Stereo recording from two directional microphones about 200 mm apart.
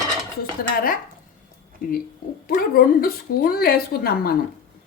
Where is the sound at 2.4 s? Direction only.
45° left (ahead or behind).